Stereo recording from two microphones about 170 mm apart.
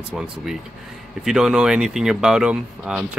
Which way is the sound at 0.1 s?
Centre (ahead or behind).